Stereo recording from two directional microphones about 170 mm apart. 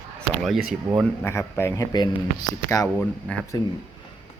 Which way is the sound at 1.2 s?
15° left (ahead or behind).